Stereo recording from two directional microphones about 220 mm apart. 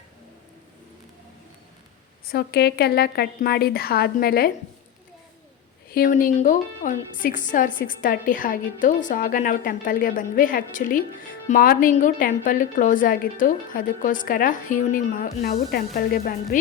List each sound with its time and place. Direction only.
2.2 s a woman's voice: 45° left (ahead or behind)
5.9 s a woman's voice: 40° left (ahead or behind)